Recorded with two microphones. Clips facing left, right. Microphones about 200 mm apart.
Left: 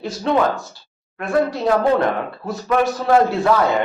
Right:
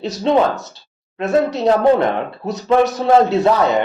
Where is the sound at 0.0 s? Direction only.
20° right (ahead or behind).